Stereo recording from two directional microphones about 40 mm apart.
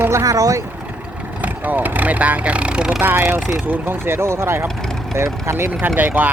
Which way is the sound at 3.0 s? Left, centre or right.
Right.